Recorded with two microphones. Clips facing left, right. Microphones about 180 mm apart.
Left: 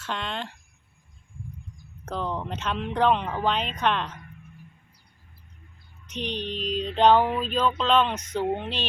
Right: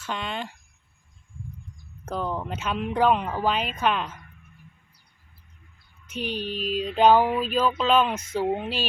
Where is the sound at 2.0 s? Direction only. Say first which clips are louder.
Right 1 dB; 5° right (ahead or behind).